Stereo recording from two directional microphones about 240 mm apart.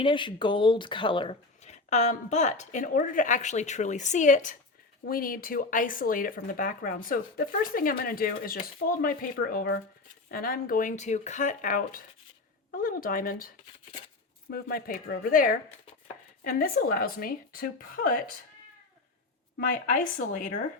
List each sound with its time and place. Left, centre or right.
0.0 s speech: centre; by 13.5 s left
14.5 s speech: left
19.5 s speech: left